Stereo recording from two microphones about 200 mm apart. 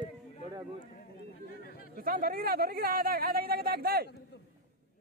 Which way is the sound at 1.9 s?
45° right (ahead or behind).